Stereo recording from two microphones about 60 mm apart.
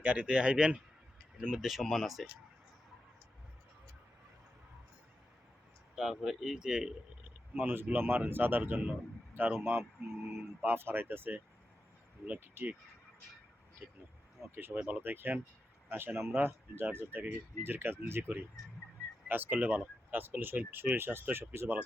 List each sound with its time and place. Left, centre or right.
0.0 s speech: right
1.5 s speech: centre
6.0 s speech: centre
7.5 s speech: right
12.6 s speech: right
13.8 s speech: right
14.5 s speech: right